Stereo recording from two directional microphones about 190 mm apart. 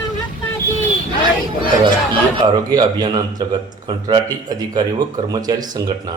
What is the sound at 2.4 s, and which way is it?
A man's voice, 20° right (ahead or behind).